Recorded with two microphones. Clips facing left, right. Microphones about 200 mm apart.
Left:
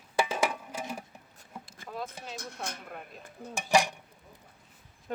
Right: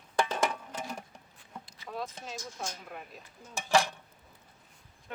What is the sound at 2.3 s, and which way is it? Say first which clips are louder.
Speech: left 1 dB; 65° left (ahead or behind).